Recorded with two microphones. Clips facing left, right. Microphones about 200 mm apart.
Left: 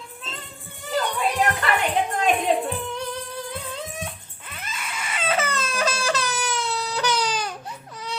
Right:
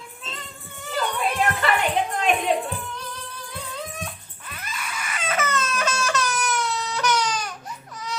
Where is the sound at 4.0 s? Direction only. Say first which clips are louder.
Left 1 dB; 25° left (ahead or behind).